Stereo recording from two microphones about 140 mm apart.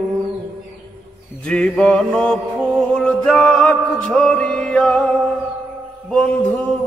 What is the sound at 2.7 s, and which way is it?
Music, 5° left (ahead or behind).